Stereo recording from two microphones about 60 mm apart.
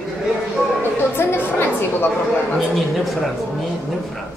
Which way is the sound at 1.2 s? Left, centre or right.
Left.